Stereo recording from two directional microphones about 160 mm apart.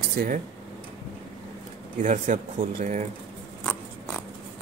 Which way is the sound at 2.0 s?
50° right (ahead or behind).